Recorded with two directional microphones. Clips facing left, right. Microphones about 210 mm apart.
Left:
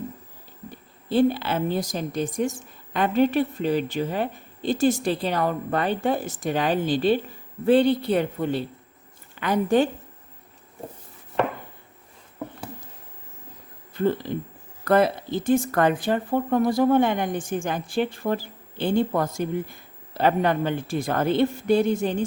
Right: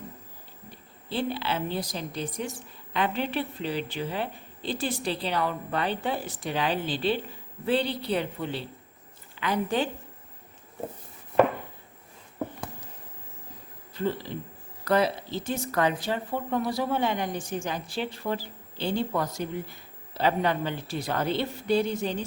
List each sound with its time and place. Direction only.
1.1 s a woman's voice: 45° left (ahead or behind)
13.9 s speech: 50° left (ahead or behind)